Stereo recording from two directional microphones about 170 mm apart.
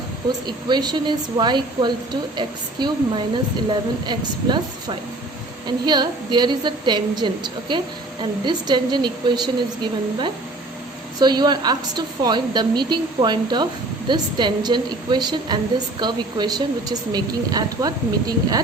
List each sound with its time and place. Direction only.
0.3 s a woman's voice: 25° right (ahead or behind)
11.2 s a woman's voice: 25° right (ahead or behind)